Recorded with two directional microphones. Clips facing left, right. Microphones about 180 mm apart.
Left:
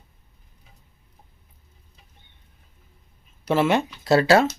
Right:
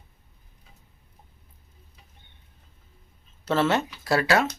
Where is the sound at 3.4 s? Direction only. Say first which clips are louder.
Left 3 dB; 15° left (ahead or behind).